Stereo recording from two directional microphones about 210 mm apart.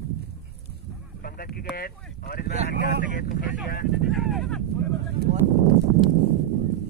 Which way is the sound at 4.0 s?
Centre (ahead or behind).